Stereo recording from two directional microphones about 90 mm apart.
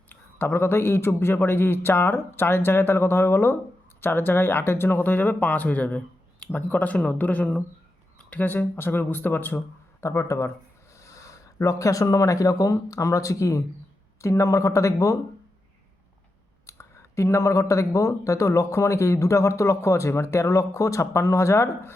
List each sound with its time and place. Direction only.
0.1 s speech: 25° left (ahead or behind)
16.6 s speech: 30° left (ahead or behind)